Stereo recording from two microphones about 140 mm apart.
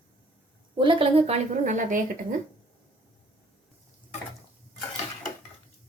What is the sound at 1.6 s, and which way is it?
Speech, 65° right (ahead or behind).